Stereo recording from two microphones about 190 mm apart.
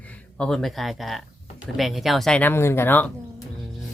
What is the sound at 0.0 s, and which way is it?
Speech, 5° left (ahead or behind).